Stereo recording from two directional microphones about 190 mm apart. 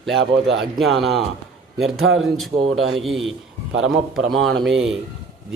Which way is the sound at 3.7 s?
85° right.